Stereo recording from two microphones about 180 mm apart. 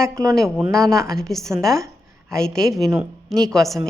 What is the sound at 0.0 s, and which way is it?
Speech, 15° right (ahead or behind).